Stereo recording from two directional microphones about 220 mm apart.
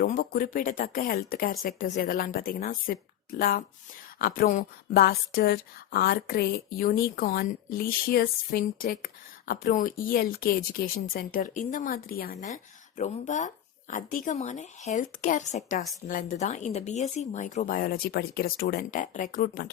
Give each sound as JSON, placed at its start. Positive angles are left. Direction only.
{"t": 0.0, "sound": "a woman's voice", "side_deg": 40}